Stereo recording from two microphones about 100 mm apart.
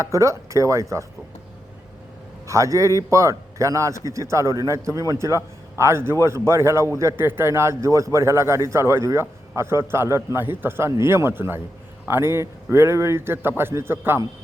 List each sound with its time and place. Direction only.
0.0 s speech: 30° right (ahead or behind)
2.5 s speech: 30° right (ahead or behind)